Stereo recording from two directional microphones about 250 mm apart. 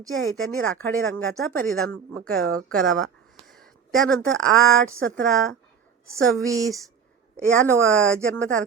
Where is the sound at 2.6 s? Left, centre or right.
Centre.